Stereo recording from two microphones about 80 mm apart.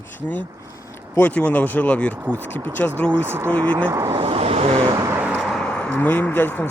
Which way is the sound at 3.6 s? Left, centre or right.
Right.